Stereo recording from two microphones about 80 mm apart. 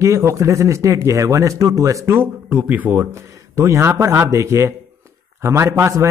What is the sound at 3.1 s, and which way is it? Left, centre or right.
A man's voice, right.